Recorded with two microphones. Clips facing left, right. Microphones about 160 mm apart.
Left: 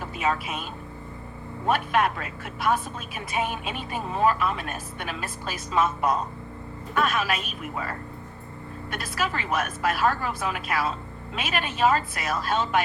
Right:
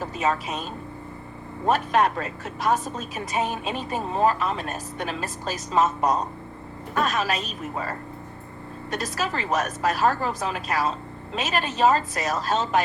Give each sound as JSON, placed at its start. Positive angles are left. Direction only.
{"t": 0.0, "sound": "speech", "side_deg": -40}